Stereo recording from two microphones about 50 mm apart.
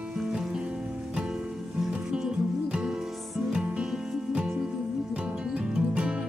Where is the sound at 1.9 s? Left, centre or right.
Centre.